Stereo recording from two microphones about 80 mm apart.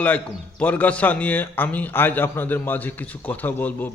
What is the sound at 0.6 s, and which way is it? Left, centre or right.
A man's voice, centre.